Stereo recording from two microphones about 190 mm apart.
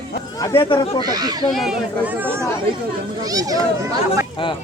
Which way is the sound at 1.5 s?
Centre (ahead or behind).